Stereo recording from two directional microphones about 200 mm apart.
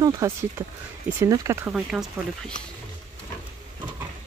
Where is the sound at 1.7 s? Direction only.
Centre (ahead or behind).